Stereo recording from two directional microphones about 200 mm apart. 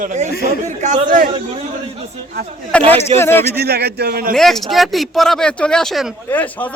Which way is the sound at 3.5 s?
50° right (ahead or behind).